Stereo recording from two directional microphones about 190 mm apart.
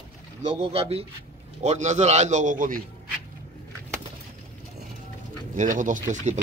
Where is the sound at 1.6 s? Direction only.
40° right (ahead or behind).